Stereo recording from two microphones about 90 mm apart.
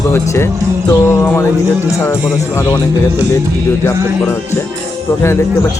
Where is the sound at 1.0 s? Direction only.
25° left (ahead or behind).